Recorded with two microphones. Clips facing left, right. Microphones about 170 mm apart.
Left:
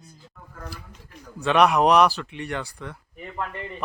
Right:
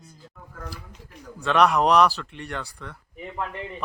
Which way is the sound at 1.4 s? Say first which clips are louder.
Left 1 dB; 5° left (ahead or behind).